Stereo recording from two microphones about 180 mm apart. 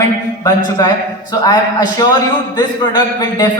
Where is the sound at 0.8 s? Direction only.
20° left (ahead or behind).